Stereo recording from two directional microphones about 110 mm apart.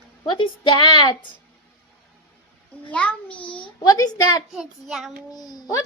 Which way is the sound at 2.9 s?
10° left (ahead or behind).